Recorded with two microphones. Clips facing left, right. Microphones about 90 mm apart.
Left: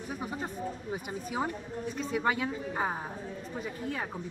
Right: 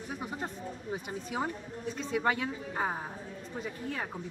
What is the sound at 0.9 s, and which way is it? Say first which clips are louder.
A woman's voice: even; 10° left (ahead or behind).